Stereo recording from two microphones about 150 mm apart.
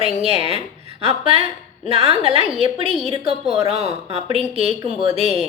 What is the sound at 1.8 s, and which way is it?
Speech, 40° right (ahead or behind).